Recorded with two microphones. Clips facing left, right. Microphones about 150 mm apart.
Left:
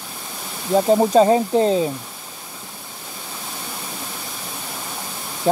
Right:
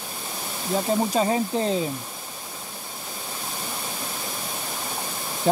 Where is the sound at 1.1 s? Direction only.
35° left (ahead or behind).